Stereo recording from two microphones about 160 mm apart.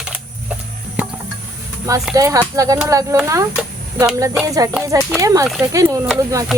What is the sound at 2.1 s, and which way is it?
Speech, 20° right (ahead or behind).